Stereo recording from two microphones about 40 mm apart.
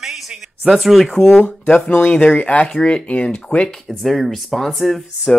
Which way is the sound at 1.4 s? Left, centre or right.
Left.